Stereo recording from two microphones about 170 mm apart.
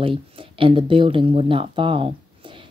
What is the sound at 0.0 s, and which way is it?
Speech, 30° right (ahead or behind).